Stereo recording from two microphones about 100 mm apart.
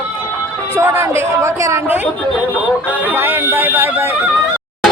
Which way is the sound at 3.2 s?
20° right (ahead or behind).